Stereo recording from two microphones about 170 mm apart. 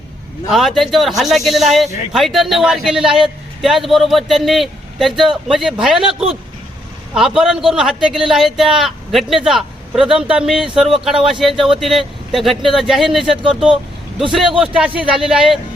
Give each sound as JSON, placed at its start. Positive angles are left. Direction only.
{"t": 0.5, "sound": "speech", "side_deg": 0}
{"t": 7.3, "sound": "speech", "side_deg": 0}
{"t": 14.6, "sound": "speech", "side_deg": -5}